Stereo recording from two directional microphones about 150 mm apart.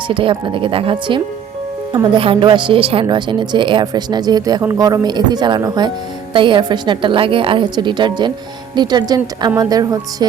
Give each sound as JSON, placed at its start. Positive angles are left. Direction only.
{"t": 0.1, "sound": "a woman's voice", "side_deg": -35}